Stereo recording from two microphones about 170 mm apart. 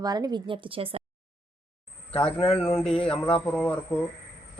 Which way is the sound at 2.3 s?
35° left (ahead or behind).